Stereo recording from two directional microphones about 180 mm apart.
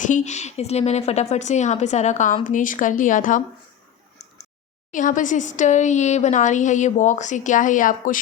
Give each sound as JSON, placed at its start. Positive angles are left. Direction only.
{"t": 0.0, "sound": "a woman's voice", "side_deg": 45}
{"t": 4.9, "sound": "speech", "side_deg": 45}